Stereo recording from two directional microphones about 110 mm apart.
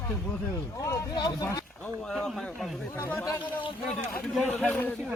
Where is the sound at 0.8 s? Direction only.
30° left (ahead or behind).